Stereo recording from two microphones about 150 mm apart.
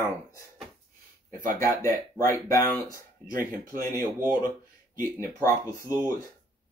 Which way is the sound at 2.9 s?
65° right (ahead or behind).